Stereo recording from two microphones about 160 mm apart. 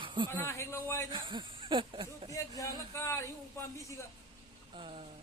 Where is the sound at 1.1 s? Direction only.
30° right (ahead or behind).